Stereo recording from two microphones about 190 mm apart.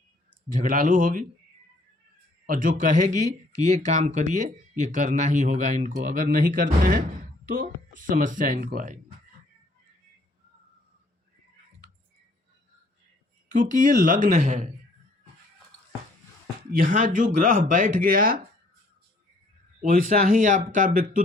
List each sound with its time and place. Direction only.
0.5 s speech: 45° right (ahead or behind)
2.5 s speech: 45° right (ahead or behind)
13.5 s speech: 45° right (ahead or behind)
16.7 s speech: 45° right (ahead or behind)
19.8 s speech: 45° right (ahead or behind)